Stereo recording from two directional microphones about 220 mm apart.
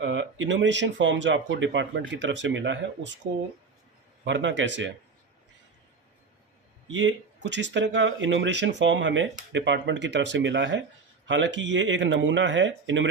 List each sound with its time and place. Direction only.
0.0 s speech: 55° right (ahead or behind)
4.2 s speech: 55° right (ahead or behind)
6.9 s speech: 60° right (ahead or behind)